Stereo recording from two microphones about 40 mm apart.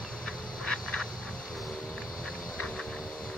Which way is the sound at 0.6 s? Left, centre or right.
Centre.